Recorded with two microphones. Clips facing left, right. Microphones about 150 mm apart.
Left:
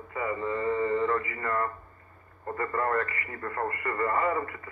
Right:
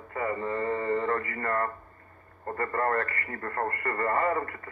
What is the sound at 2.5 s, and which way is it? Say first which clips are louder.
Speech: even; 45° right (ahead or behind).